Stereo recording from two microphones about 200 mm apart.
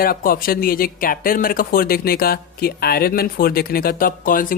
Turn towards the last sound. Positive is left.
turn(degrees=45)  # may be behind; listen again after turning